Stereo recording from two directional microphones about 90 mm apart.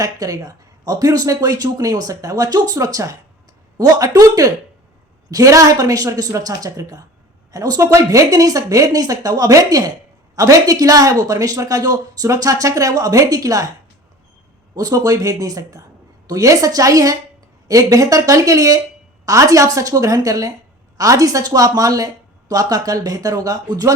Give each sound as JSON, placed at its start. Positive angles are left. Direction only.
{"t": 0.0, "sound": "speech", "side_deg": -40}
{"t": 14.8, "sound": "speech", "side_deg": -40}